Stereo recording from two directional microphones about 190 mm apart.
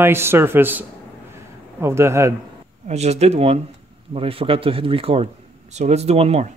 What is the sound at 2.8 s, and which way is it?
Speech, 35° right (ahead or behind).